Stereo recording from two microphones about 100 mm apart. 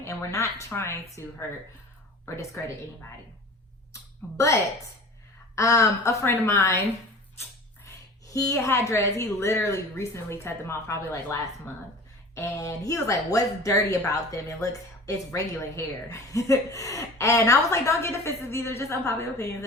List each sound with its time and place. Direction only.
0.0 s a woman's voice: 30° left (ahead or behind)
4.4 s a woman's voice: 30° left (ahead or behind)
7.9 s a woman's voice: 35° left (ahead or behind)